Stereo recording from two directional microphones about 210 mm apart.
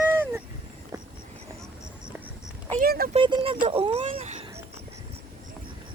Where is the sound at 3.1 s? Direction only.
25° right (ahead or behind).